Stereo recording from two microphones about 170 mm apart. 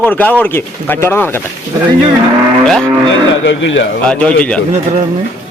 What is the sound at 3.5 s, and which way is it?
Speech, 90° left.